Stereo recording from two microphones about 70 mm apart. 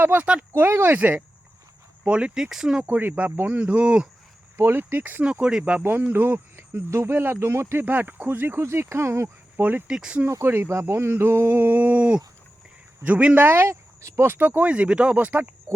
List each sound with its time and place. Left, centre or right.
0.0 s speech: right
2.0 s speech: centre
2.8 s speech: right
4.5 s speech: right
5.2 s speech: centre
6.0 s speech: right
9.6 s speech: right
9.9 s speech: centre
10.2 s speech: right
14.3 s speech: right